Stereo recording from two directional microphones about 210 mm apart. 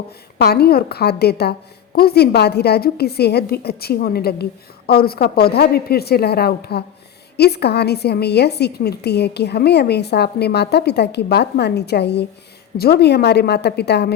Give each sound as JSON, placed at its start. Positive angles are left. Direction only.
{"t": 0.3, "sound": "a woman's voice", "side_deg": 50}